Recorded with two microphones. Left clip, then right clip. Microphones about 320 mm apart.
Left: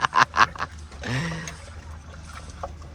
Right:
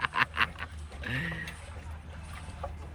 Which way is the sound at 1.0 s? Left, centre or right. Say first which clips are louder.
Left 4 dB; centre.